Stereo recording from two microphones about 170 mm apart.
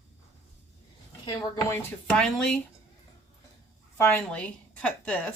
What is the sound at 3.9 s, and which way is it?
A woman's voice, 10° left (ahead or behind).